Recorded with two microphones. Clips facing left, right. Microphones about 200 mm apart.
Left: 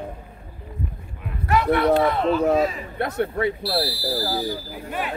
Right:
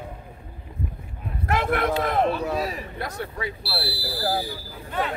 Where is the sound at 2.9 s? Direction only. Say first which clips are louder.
Left 8 dB; 60° left (ahead or behind).